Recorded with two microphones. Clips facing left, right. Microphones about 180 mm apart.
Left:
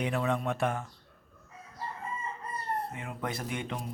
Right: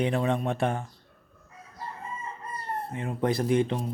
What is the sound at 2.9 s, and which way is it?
Speech, 30° right (ahead or behind).